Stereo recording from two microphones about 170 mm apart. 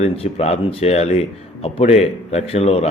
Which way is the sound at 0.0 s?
35° left (ahead or behind).